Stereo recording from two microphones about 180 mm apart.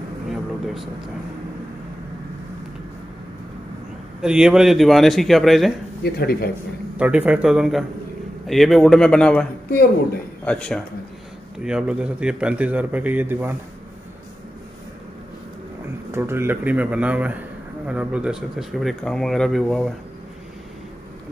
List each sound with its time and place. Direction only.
4.2 s speech: 5° right (ahead or behind)
6.0 s speech: 60° left (ahead or behind)
7.0 s a man's voice: 5° right (ahead or behind)
11.6 s a man's voice: 5° right (ahead or behind)
16.1 s a man's voice: 15° right (ahead or behind)